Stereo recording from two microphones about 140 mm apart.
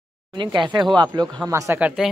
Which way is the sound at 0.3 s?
35° right (ahead or behind).